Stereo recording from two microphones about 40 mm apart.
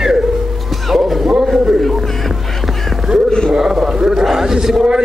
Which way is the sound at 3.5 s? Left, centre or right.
Centre.